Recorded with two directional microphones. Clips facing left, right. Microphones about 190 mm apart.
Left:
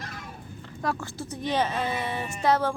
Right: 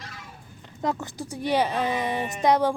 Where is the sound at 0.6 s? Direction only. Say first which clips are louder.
Right 2 dB; 20° right (ahead or behind).